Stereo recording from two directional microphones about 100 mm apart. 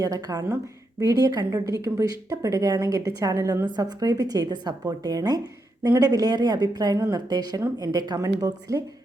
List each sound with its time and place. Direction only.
0.0 s speech: 40° right (ahead or behind)